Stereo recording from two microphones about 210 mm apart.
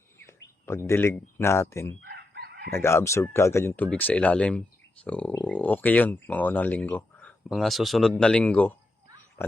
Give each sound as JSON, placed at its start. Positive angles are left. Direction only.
{"t": 0.6, "sound": "speech", "side_deg": 15}
{"t": 2.0, "sound": "chicken", "side_deg": -50}
{"t": 2.6, "sound": "speech", "side_deg": 10}